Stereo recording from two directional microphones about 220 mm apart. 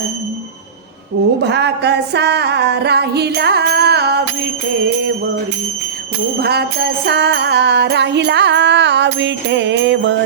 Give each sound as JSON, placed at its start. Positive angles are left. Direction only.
{"t": 1.4, "sound": "music", "side_deg": -50}
{"t": 6.4, "sound": "music", "side_deg": -45}